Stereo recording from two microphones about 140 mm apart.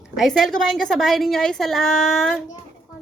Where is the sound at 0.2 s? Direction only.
Centre (ahead or behind).